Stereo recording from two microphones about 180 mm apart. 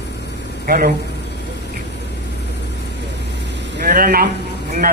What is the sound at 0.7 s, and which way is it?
Speech, 50° right (ahead or behind).